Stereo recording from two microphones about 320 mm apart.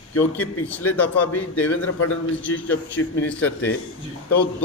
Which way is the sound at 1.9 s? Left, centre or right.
Left.